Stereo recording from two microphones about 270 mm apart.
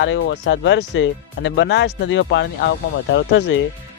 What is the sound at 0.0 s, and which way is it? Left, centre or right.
Speech, left.